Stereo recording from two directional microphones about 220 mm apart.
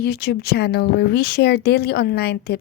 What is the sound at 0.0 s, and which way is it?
Speech, 45° left (ahead or behind).